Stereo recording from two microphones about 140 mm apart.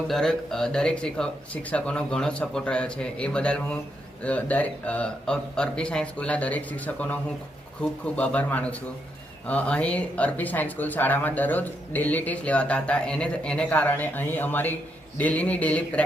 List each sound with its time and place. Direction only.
0.1 s speech: 5° left (ahead or behind)